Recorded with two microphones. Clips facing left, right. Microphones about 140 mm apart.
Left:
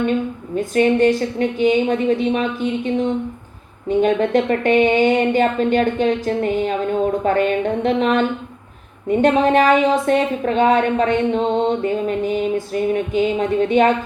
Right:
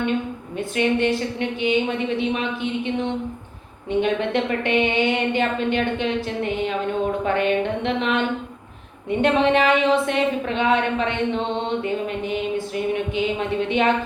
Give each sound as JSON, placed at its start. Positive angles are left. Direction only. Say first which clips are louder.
{"t": 0.7, "sound": "a woman's voice", "louder": "left 6 dB", "side_deg": 40}